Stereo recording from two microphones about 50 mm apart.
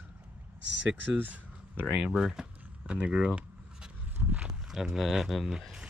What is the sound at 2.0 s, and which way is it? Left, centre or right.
Speech, centre.